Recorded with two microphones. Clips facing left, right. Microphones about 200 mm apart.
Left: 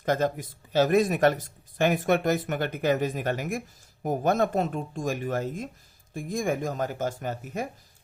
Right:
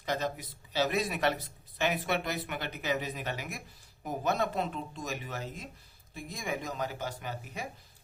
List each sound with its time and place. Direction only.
0.0 s speech: 50° left (ahead or behind)